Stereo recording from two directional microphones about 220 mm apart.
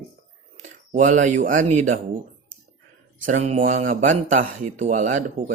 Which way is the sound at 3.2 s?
30° right (ahead or behind).